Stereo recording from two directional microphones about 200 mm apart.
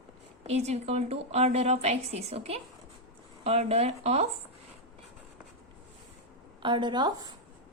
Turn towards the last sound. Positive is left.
turn(degrees=-20)  # may be behind; listen again after turning